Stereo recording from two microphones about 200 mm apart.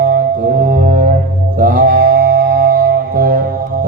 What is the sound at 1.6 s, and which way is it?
Mantra, 45° right (ahead or behind).